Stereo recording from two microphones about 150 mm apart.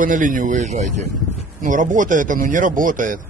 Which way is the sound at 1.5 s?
60° right (ahead or behind).